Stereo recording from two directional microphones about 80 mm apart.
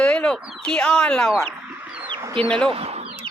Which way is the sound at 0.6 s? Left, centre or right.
Centre.